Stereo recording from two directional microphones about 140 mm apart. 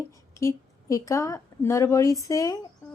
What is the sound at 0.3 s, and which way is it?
A woman's voice, 20° left (ahead or behind).